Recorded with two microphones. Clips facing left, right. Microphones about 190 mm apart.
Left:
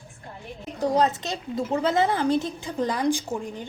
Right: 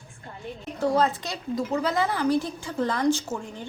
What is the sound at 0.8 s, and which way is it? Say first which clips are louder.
A woman's voice: left 1 dB; 20° left (ahead or behind).